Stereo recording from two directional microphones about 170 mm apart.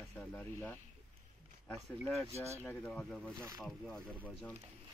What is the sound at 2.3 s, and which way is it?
Speech, 15° right (ahead or behind).